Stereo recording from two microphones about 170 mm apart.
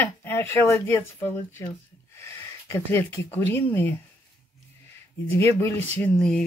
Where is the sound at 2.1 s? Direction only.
15° left (ahead or behind).